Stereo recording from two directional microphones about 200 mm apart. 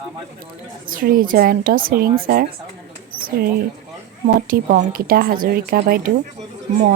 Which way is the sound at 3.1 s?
45° right (ahead or behind).